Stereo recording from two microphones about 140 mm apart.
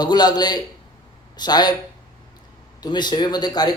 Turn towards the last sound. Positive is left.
turn(degrees=30)  # may be behind; listen again after turning